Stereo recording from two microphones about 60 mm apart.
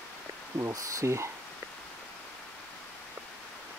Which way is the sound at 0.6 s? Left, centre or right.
Right.